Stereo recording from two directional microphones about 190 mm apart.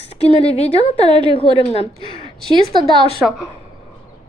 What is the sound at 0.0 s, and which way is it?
A woman's voice, 35° left (ahead or behind).